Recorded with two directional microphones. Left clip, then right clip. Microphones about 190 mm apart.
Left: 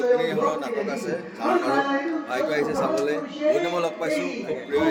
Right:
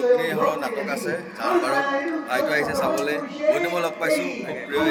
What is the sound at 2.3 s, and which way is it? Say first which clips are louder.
A man's voice: right 2 dB; 20° left (ahead or behind).